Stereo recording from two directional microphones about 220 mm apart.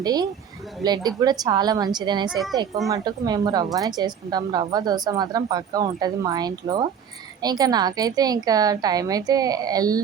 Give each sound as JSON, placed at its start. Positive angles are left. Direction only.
{"t": 0.0, "sound": "speech", "side_deg": -15}